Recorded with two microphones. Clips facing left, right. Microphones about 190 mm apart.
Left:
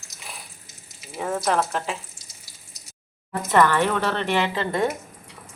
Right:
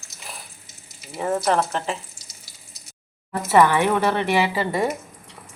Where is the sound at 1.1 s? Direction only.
5° right (ahead or behind).